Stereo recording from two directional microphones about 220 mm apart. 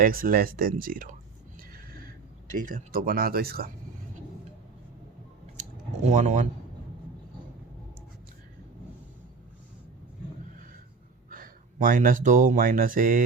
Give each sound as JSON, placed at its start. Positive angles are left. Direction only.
{"t": 0.0, "sound": "speech", "side_deg": -40}
{"t": 2.6, "sound": "speech", "side_deg": -40}
{"t": 5.5, "sound": "a sound", "side_deg": -30}
{"t": 11.3, "sound": "speech", "side_deg": -40}